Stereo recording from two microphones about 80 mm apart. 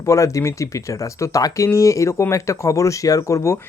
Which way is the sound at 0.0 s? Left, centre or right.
Left.